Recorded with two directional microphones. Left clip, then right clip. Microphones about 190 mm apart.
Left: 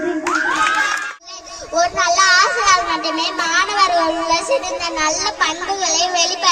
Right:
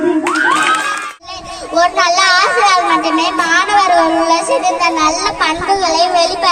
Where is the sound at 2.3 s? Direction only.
30° left (ahead or behind).